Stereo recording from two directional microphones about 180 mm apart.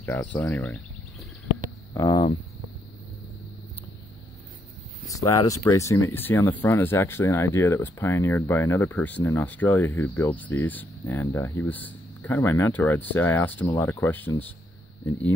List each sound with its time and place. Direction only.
0.0 s speech: 10° left (ahead or behind)
2.0 s speech: 20° left (ahead or behind)
5.1 s speech: 20° left (ahead or behind)